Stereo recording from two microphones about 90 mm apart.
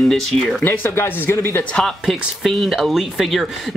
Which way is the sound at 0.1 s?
5° left (ahead or behind).